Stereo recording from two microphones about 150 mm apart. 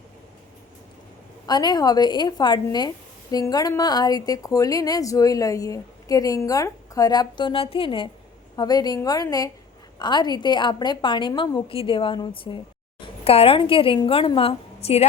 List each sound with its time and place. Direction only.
1.5 s a woman's voice: 30° left (ahead or behind); by 15.0 s 45° left (ahead or behind)